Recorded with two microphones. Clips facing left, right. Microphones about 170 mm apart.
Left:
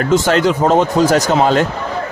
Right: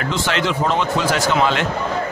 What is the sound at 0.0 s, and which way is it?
Speech, 40° left (ahead or behind).